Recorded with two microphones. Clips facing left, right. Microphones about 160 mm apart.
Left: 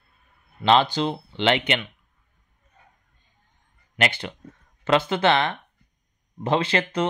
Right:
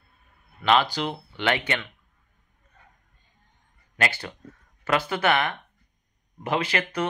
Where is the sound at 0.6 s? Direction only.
30° left (ahead or behind).